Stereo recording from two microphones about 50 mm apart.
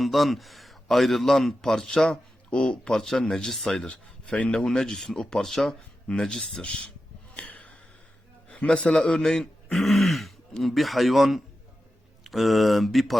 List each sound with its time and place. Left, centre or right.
0.0 s a man's voice: centre
3.8 s a man's voice: left
7.3 s gasp: left
8.5 s a man's voice: left
9.7 s throat clearing: centre
10.5 s speech: centre